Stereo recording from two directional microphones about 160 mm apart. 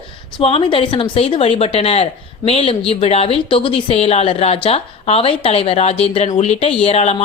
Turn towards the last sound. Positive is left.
turn(degrees=40)  # may be behind; listen again after turning